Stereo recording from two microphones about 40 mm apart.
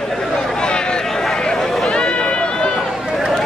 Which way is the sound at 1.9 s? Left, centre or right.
Left.